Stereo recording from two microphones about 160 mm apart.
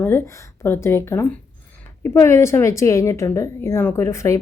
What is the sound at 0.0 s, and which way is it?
A woman's voice, 15° left (ahead or behind).